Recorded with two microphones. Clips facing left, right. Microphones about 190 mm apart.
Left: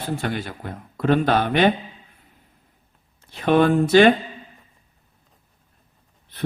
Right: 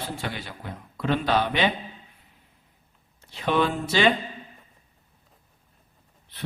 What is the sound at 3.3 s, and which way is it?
Speech, 50° left (ahead or behind).